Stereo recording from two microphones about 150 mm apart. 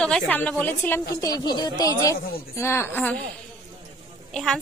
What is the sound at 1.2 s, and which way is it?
Speech, 25° left (ahead or behind).